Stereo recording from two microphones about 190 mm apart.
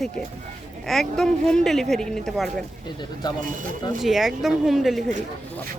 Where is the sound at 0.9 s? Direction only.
Centre (ahead or behind).